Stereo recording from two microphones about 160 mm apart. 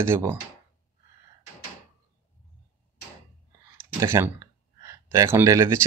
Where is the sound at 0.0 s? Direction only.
15° right (ahead or behind).